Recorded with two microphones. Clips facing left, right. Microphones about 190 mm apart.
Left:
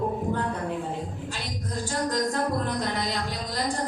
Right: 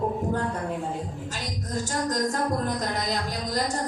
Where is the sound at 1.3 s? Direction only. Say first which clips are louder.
Right 2 dB; 45° right (ahead or behind).